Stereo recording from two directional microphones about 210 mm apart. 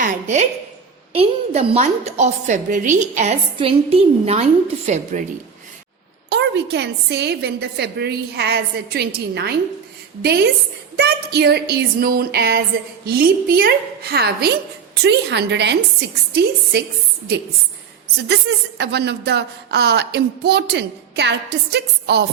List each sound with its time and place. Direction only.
0.0 s a woman's voice: 35° right (ahead or behind)
6.3 s speech: 55° right (ahead or behind)
18.3 s speech: 55° right (ahead or behind)